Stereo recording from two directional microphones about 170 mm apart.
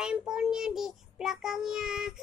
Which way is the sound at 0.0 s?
5° right (ahead or behind).